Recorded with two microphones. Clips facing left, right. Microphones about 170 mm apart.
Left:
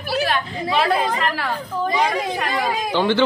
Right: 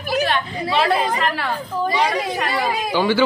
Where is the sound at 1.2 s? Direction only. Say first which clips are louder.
Right 1 dB; centre (ahead or behind).